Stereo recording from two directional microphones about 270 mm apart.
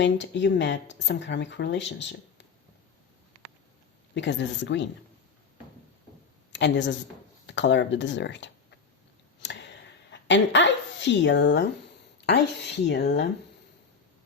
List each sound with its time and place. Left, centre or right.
0.0 s speech: left
4.1 s speech: left
6.5 s speech: left
9.4 s a sound: left
12.2 s speech: left